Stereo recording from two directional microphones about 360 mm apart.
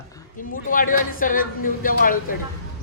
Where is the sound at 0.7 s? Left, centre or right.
Left.